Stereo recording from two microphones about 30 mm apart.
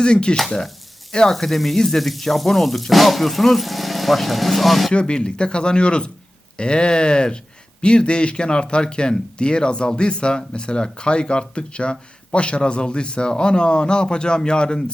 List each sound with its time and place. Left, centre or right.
0.0 s speech: left
1.3 s frying: centre
2.3 s speech: centre
4.9 s speech: left